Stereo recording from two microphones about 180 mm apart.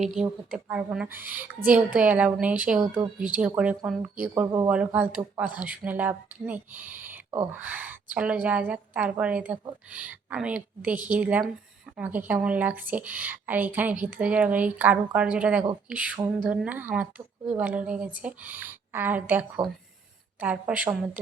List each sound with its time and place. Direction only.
0.2 s speech: 5° right (ahead or behind)